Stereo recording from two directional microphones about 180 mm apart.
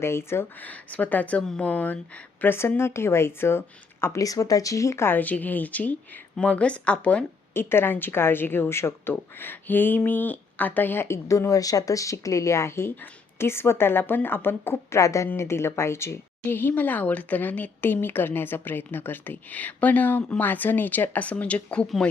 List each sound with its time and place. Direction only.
0.0 s speech: 15° left (ahead or behind)